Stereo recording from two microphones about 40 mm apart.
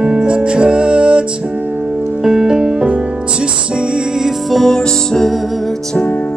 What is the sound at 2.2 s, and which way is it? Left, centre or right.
Music, centre.